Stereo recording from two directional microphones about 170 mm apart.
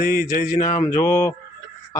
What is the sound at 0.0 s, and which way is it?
Speech, 60° left (ahead or behind).